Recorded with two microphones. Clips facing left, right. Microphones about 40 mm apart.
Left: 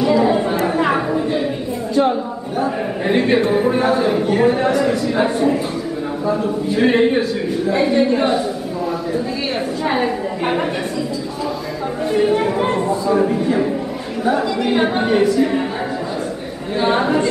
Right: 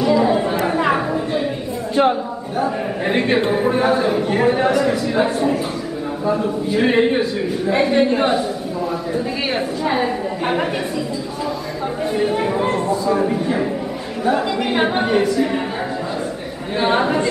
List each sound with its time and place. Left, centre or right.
0.0 s chatter: centre
2.5 s a man's voice: centre
9.8 s a man's voice: centre
12.1 s a man's voice: centre
14.7 s a man's voice: centre
16.8 s a man's voice: centre